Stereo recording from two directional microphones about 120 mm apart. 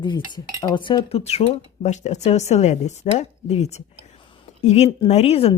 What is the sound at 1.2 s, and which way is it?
A woman's voice, 65° left (ahead or behind).